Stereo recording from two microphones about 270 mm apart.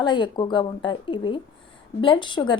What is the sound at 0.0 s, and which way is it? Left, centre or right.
A woman's voice, centre.